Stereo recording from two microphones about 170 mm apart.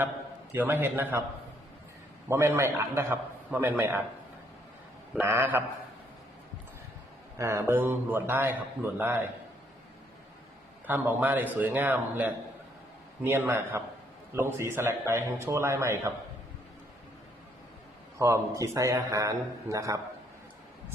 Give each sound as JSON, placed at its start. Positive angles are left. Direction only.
{"t": 0.5, "sound": "a man's voice", "side_deg": -10}
{"t": 2.3, "sound": "a man's voice", "side_deg": -15}
{"t": 5.1, "sound": "a man's voice", "side_deg": -15}
{"t": 7.3, "sound": "a man's voice", "side_deg": -15}
{"t": 10.8, "sound": "a man's voice", "side_deg": -10}
{"t": 18.2, "sound": "a man's voice", "side_deg": -20}